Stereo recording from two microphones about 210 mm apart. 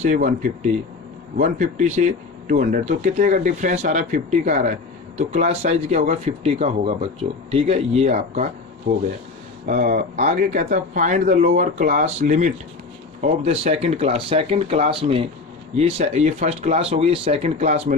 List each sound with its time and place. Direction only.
0.0 s speech: 35° right (ahead or behind)
1.4 s speech: 35° right (ahead or behind)
9.6 s speech: 40° right (ahead or behind)